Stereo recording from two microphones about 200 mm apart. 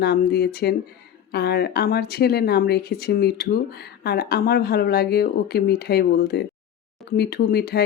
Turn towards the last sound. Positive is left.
turn(degrees=50)  # may be behind; listen again after turning